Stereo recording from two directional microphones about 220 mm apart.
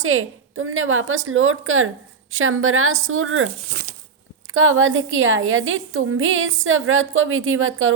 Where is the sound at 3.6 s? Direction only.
35° right (ahead or behind).